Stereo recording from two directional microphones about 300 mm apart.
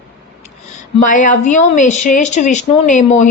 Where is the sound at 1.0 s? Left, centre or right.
Left.